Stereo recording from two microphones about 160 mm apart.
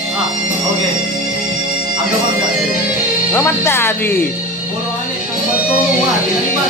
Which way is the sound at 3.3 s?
15° left (ahead or behind).